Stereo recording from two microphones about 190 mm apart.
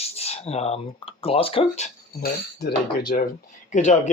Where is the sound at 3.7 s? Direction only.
40° left (ahead or behind).